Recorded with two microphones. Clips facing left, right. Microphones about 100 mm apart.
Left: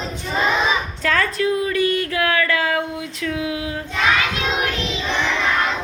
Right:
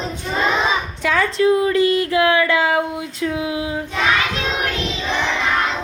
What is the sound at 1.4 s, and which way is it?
Speech, 25° right (ahead or behind).